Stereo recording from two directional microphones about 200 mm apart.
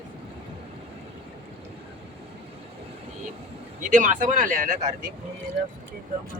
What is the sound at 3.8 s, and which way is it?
Speech, 40° right (ahead or behind).